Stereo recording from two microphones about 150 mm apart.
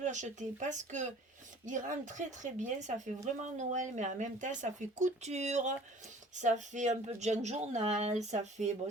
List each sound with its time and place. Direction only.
0.0 s speech: 55° right (ahead or behind)